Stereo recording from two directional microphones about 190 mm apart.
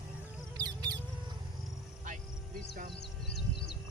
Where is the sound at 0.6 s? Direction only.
20° right (ahead or behind).